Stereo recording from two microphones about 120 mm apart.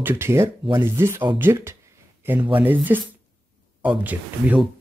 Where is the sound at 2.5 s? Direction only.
15° right (ahead or behind).